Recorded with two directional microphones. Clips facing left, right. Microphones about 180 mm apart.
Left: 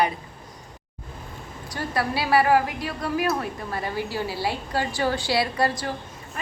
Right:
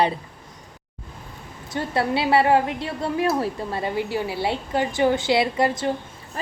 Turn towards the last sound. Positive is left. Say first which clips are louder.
# right 3 dB
turn(degrees=-20)  # may be behind; listen again after turning